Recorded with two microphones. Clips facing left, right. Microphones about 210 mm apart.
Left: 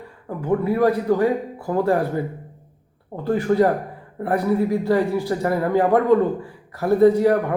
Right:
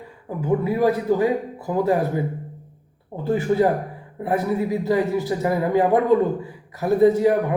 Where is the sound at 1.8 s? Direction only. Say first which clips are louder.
Even; 20° right (ahead or behind).